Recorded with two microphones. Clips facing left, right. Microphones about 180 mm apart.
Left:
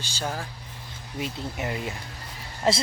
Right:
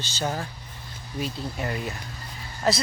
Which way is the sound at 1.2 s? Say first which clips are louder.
Right 1 dB; 20° left (ahead or behind).